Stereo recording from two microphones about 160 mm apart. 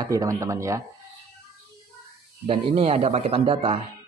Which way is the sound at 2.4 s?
40° right (ahead or behind).